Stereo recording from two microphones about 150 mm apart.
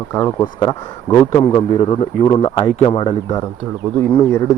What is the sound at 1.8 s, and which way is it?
A man's voice, 40° left (ahead or behind).